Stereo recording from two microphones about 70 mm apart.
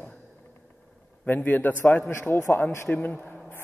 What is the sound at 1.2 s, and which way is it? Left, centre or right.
A man's voice, left.